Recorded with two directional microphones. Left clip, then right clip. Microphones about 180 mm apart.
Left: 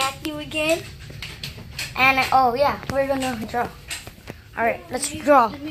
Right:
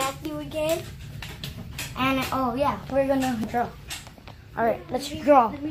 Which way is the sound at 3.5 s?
Centre (ahead or behind).